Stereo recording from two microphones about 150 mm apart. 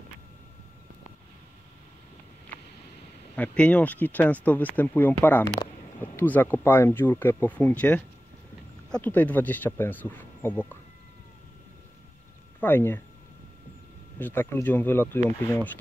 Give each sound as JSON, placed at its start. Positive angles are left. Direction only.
{"t": 3.3, "sound": "speech", "side_deg": 10}
{"t": 12.5, "sound": "speech", "side_deg": 15}
{"t": 14.2, "sound": "speech", "side_deg": 15}